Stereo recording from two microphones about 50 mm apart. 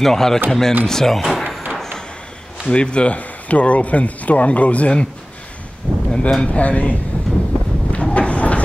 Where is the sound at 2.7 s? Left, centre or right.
Left.